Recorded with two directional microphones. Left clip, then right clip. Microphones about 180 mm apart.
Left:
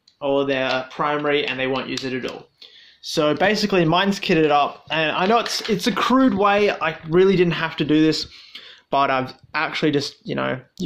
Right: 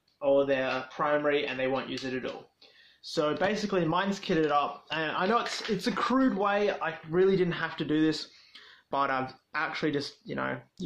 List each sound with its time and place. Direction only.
0.2 s speech: 40° left (ahead or behind)